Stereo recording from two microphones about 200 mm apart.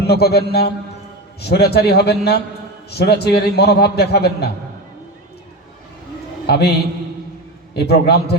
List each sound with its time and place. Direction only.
0.0 s a man's voice: 55° left (ahead or behind)
6.5 s a man's voice: 55° left (ahead or behind)